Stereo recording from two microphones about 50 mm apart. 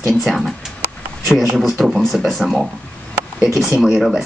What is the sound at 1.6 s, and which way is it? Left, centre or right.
Speech, centre.